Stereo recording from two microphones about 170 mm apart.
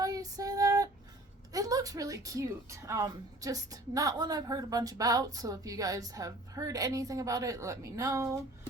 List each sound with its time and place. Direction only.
0.0 s female singing: 20° right (ahead or behind)
1.5 s a woman's voice: 20° right (ahead or behind)